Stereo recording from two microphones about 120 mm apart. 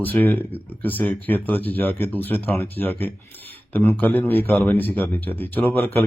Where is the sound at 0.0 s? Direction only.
15° left (ahead or behind).